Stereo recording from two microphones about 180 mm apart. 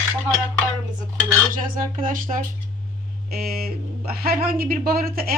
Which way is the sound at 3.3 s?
55° right (ahead or behind).